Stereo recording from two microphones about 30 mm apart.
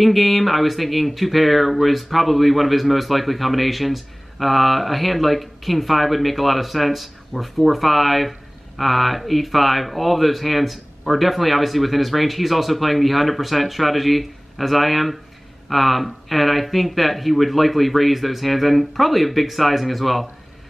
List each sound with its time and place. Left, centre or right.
0.0 s speech: centre